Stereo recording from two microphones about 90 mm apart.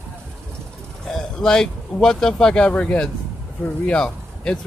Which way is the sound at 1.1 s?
5° left (ahead or behind).